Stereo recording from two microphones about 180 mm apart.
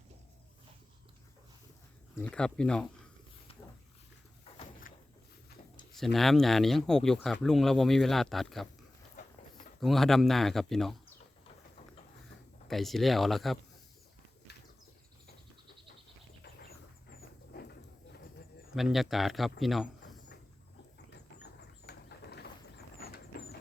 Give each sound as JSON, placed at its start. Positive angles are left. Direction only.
{"t": 2.1, "sound": "speech", "side_deg": 5}
{"t": 3.5, "sound": "dog", "side_deg": 30}
{"t": 4.9, "sound": "walk", "side_deg": 50}
{"t": 5.9, "sound": "speech", "side_deg": 0}
{"t": 9.8, "sound": "speech", "side_deg": 0}
{"t": 12.6, "sound": "speech", "side_deg": 0}
{"t": 16.4, "sound": "a sound", "side_deg": 60}
{"t": 18.7, "sound": "speech", "side_deg": 0}
{"t": 21.1, "sound": "a sound", "side_deg": 70}